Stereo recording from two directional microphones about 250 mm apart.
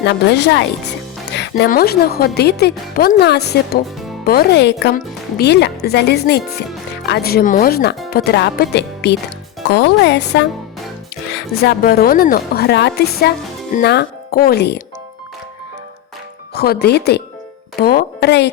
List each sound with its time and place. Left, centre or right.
0.0 s speech: left
16.6 s a woman's voice: left